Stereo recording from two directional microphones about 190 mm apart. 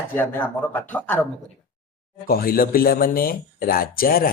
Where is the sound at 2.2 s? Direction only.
50° left (ahead or behind).